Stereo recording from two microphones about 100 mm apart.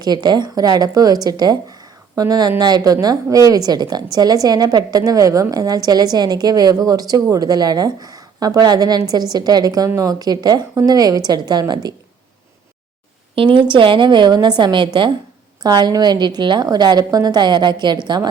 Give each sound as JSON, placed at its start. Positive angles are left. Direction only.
{"t": 0.0, "sound": "a woman's voice", "side_deg": -45}
{"t": 13.3, "sound": "a woman's voice", "side_deg": -60}